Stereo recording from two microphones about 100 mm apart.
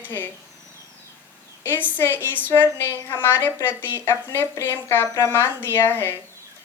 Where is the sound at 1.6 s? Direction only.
20° left (ahead or behind).